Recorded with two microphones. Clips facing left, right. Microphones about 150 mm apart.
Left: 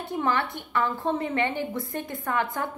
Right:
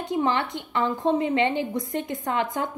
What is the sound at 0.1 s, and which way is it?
A woman's voice, 20° right (ahead or behind).